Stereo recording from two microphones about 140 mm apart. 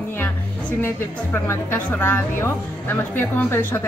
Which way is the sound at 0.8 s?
15° left (ahead or behind).